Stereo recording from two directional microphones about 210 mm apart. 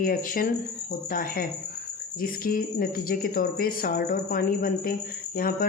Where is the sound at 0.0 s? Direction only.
40° left (ahead or behind).